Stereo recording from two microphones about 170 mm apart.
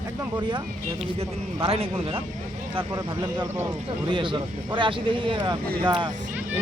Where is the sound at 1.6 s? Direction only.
35° right (ahead or behind).